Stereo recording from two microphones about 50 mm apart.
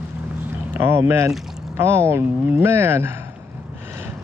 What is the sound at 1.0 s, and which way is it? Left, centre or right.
Speech, right.